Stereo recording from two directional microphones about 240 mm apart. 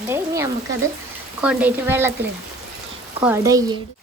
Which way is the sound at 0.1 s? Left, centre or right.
Centre.